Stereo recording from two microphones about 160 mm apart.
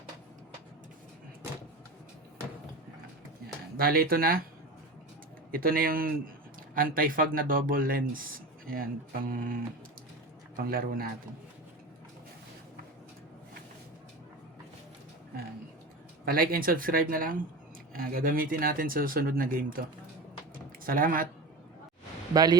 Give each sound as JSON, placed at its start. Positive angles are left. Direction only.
{"t": 3.8, "sound": "speech", "side_deg": -70}
{"t": 5.5, "sound": "speech", "side_deg": -65}
{"t": 10.7, "sound": "speech", "side_deg": -65}
{"t": 16.2, "sound": "speech", "side_deg": -70}
{"t": 20.8, "sound": "speech", "side_deg": -60}
{"t": 22.3, "sound": "speech", "side_deg": -25}